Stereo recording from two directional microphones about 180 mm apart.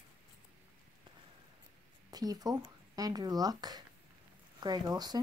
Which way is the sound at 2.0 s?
20° right (ahead or behind).